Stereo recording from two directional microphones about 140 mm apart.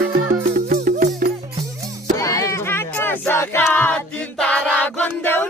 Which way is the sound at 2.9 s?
15° left (ahead or behind).